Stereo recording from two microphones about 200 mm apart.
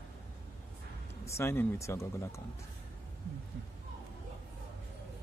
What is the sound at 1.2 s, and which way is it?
Speech, 15° left (ahead or behind).